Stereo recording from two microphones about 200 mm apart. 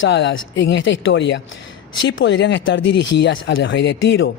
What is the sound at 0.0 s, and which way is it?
Speech, 65° left (ahead or behind).